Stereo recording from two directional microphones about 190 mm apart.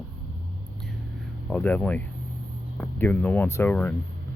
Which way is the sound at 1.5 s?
10° left (ahead or behind).